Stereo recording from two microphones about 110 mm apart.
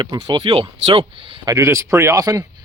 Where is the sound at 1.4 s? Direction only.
30° right (ahead or behind).